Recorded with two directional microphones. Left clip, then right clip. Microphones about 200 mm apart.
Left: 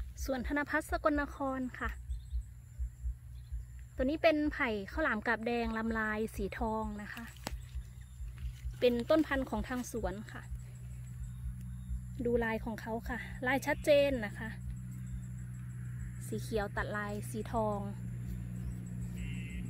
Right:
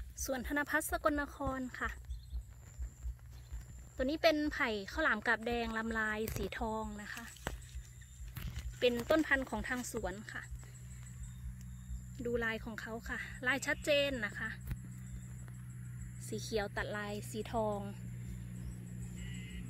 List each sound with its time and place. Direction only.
0.2 s speech: centre (ahead or behind)
3.9 s a woman's voice: 5° left (ahead or behind)
9.0 s speech: 5° left (ahead or behind)
12.2 s speech: 20° left (ahead or behind)
16.2 s speech: centre (ahead or behind)